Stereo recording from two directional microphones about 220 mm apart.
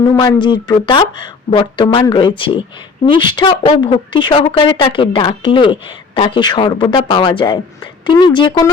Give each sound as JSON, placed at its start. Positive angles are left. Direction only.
{"t": 0.1, "sound": "speech", "side_deg": 20}